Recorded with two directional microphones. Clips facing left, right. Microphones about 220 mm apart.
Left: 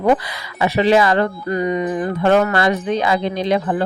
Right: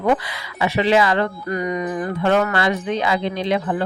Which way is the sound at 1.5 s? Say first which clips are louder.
Left 5 dB; 30° left (ahead or behind).